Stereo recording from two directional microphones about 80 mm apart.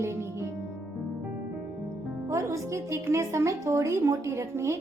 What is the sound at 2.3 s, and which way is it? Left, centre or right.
A woman's voice, right.